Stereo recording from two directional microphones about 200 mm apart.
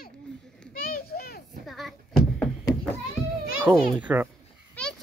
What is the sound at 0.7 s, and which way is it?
Children playing, 45° left (ahead or behind).